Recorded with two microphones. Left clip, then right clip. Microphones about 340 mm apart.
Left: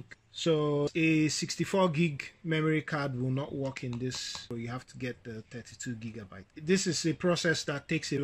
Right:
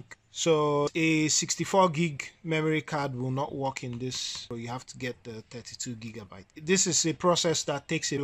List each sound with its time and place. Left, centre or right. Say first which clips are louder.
0.4 s speech: right 4 dB; centre